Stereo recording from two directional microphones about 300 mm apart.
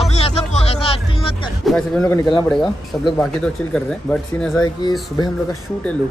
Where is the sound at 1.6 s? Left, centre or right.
Centre.